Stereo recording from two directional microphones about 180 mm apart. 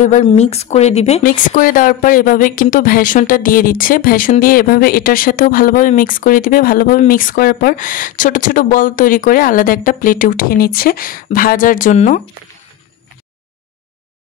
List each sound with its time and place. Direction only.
0.0 s a woman's voice: 45° left (ahead or behind)
1.2 s a woman's voice: 50° left (ahead or behind)